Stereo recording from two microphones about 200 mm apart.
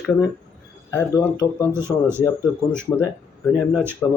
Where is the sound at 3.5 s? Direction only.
10° right (ahead or behind).